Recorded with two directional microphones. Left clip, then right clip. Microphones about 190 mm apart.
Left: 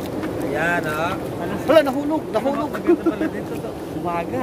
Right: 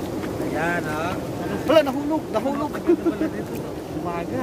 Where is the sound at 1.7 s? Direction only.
5° left (ahead or behind).